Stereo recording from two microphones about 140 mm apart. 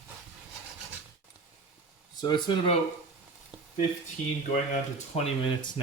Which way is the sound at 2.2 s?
30° left (ahead or behind).